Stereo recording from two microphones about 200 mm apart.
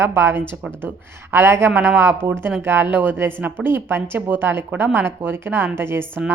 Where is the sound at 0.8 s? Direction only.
10° right (ahead or behind).